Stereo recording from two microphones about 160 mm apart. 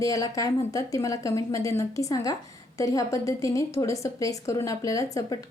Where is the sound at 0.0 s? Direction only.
20° left (ahead or behind).